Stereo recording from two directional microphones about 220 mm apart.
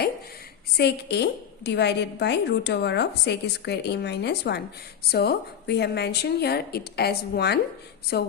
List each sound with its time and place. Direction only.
0.8 s a woman's voice: 50° left (ahead or behind)